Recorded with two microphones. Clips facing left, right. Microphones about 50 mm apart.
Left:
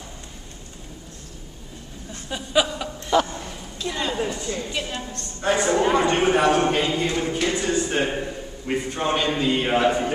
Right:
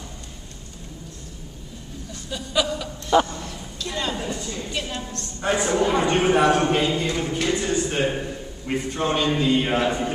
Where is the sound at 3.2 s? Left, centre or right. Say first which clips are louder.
Even; centre.